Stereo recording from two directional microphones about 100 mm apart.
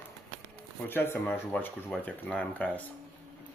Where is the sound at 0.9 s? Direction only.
20° left (ahead or behind).